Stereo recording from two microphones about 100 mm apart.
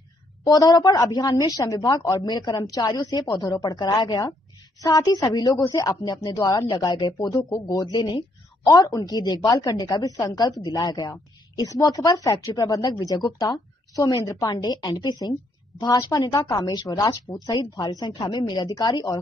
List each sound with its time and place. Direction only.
0.4 s a woman's voice: 40° left (ahead or behind)
8.6 s a woman's voice: 35° left (ahead or behind)
14.5 s a woman's voice: 45° left (ahead or behind)
17.5 s a woman's voice: 50° left (ahead or behind)